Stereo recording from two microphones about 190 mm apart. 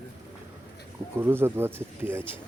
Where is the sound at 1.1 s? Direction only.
10° right (ahead or behind).